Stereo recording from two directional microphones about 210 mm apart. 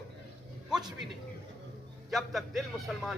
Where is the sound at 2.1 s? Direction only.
Centre (ahead or behind).